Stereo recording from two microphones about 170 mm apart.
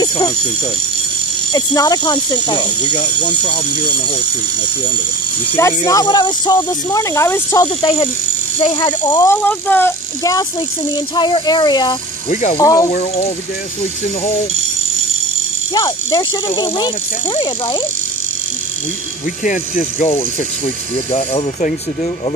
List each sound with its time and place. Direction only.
1.5 s speech: 25° left (ahead or behind)
5.9 s speech: 20° left (ahead or behind)
9.3 s speech: 10° left (ahead or behind)
11.1 s speech: 25° left (ahead or behind)
12.3 s speech: 50° left (ahead or behind)
12.5 s speech: 20° left (ahead or behind)
12.9 s speech: 45° left (ahead or behind)
15.7 s speech: 25° left (ahead or behind)
19.4 s speech: 50° left (ahead or behind)
21.1 s speech: 35° left (ahead or behind)